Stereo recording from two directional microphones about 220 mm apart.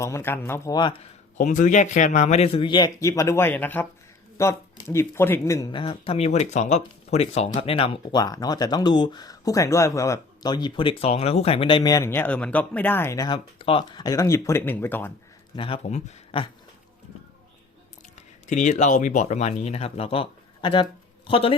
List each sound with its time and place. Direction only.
0.0 s speech: 10° left (ahead or behind)
1.4 s a man's voice: 35° left (ahead or behind); by 15.1 s 10° left (ahead or behind)
15.5 s speech: 25° left (ahead or behind)
18.4 s speech: 35° left (ahead or behind)